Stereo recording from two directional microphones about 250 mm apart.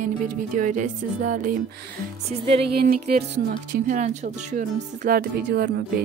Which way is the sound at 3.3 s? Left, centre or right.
Right.